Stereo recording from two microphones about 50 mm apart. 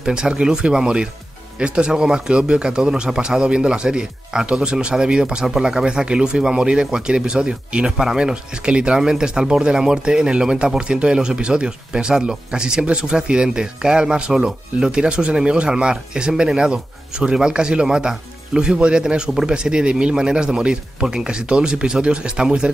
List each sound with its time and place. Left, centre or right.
0.0 s speech: centre